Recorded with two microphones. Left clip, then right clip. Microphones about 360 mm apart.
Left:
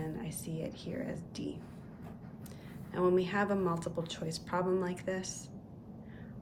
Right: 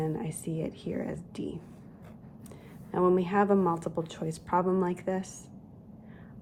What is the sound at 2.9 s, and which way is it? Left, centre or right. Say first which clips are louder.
A woman's voice: right 5 dB; centre.